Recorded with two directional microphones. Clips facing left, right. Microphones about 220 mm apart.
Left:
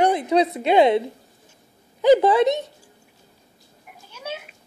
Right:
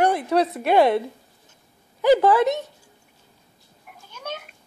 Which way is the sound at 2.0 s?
20° left (ahead or behind).